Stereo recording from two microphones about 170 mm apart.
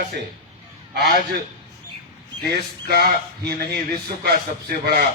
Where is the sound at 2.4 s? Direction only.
70° right (ahead or behind).